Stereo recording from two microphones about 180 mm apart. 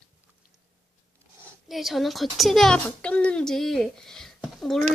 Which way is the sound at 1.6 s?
Centre (ahead or behind).